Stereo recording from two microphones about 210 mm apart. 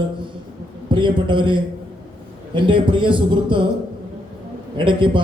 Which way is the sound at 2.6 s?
25° right (ahead or behind).